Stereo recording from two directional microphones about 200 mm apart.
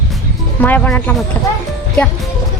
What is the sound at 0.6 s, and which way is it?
Speech, 10° left (ahead or behind).